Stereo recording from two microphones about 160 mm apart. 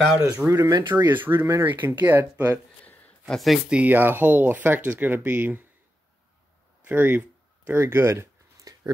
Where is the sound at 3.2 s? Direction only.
Centre (ahead or behind).